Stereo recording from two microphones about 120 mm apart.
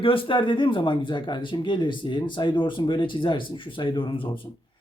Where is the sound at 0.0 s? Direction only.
50° left (ahead or behind).